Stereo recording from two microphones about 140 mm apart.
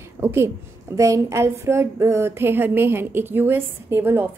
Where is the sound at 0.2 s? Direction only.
15° right (ahead or behind).